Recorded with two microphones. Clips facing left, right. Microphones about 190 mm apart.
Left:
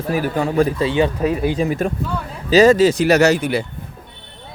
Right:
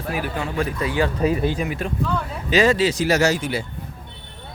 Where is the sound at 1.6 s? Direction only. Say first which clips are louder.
Left 5 dB; 40° left (ahead or behind).